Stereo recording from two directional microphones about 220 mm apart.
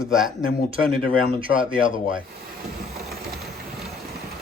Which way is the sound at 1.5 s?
50° left (ahead or behind).